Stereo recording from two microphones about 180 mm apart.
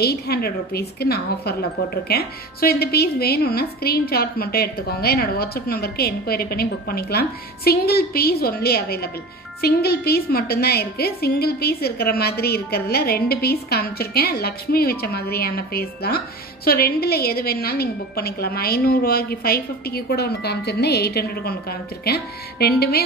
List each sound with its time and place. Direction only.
0.0 s a woman's voice: 60° left (ahead or behind)